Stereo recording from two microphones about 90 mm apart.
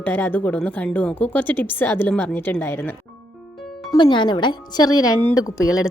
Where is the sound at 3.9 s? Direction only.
60° left (ahead or behind); by 5.7 s 40° left (ahead or behind).